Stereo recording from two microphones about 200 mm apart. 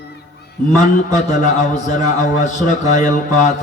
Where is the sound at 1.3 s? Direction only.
35° left (ahead or behind).